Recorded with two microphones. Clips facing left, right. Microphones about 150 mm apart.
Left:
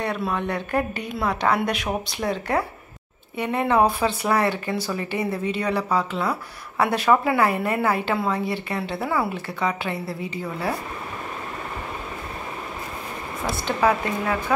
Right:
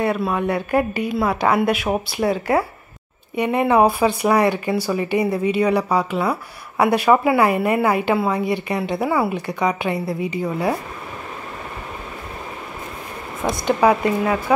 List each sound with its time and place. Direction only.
0.0 s a woman's voice: 5° right (ahead or behind)
13.4 s a woman's voice: 15° right (ahead or behind)